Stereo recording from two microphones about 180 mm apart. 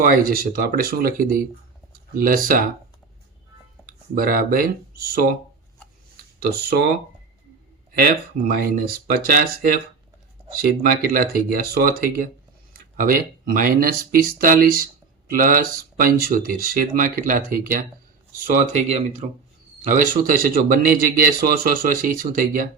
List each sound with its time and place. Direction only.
0.0 s a man's voice: 50° right (ahead or behind)
3.8 s speech: 55° right (ahead or behind)
6.4 s speech: 60° right (ahead or behind)
7.9 s speech: 55° right (ahead or behind)
11.1 s a man's voice: 55° right (ahead or behind)